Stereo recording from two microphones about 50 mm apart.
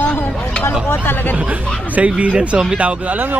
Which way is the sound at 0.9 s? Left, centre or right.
Left.